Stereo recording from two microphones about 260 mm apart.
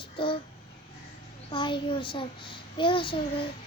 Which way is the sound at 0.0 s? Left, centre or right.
Centre.